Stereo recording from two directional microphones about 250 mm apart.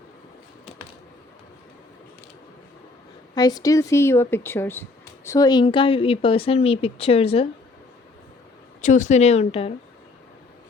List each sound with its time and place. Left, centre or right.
3.3 s speech: centre
8.8 s speech: left